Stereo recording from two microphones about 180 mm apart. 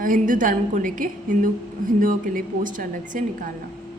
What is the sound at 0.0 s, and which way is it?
A woman's voice, 50° right (ahead or behind).